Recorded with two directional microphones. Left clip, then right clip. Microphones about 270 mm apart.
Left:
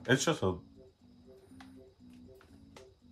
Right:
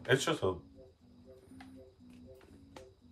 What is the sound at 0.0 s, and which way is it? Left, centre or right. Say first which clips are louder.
Speech: left 1 dB; left.